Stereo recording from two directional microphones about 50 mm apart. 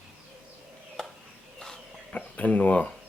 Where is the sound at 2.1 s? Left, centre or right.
Left.